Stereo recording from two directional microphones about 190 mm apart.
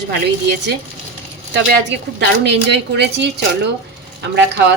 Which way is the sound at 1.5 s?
65° right (ahead or behind).